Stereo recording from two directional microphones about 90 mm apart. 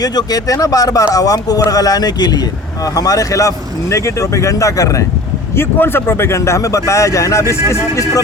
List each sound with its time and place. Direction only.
0.0 s speech: 45° left (ahead or behind)
5.5 s speech: 25° left (ahead or behind)